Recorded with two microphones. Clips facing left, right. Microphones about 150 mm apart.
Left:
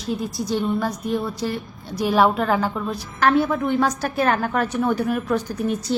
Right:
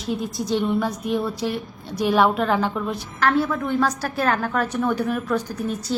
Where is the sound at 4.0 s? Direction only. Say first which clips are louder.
Left 2 dB; centre (ahead or behind).